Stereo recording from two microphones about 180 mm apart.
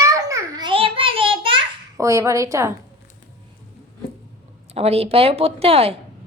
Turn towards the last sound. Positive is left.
turn(degrees=-35)  # may be behind; listen again after turning